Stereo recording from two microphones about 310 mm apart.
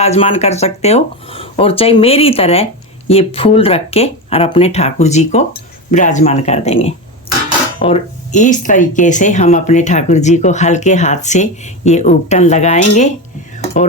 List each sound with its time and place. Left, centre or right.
0.0 s speech: centre